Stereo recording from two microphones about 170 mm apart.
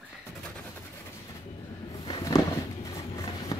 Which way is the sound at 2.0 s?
25° left (ahead or behind).